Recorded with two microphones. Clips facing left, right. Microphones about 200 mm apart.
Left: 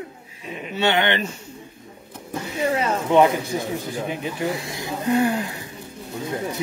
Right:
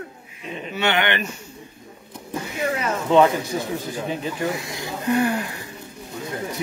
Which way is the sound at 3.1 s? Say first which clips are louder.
Right 1 dB; 15° left (ahead or behind).